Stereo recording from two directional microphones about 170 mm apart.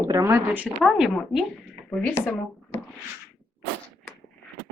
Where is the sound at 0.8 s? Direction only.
Centre (ahead or behind).